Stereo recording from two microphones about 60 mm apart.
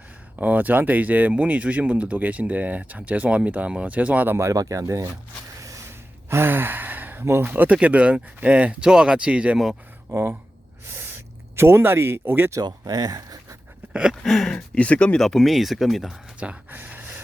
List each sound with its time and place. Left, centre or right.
0.3 s speech: right
4.5 s speech: right
6.2 s speech: right
7.5 s speech: right
10.1 s speech: right
12.5 s speech: right
14.2 s a sound: centre
14.8 s speech: centre
15.2 s speech: centre
16.6 s a sound: right